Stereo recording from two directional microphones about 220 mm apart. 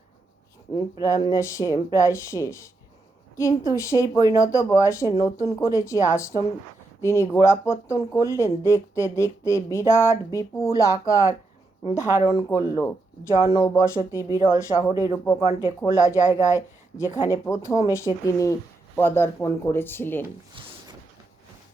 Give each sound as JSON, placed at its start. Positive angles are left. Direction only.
{"t": 1.0, "sound": "speech", "side_deg": 15}
{"t": 15.4, "sound": "speech", "side_deg": 20}
{"t": 17.2, "sound": "speech", "side_deg": -15}
{"t": 17.4, "sound": "speech", "side_deg": 15}
{"t": 20.5, "sound": "a sound", "side_deg": -20}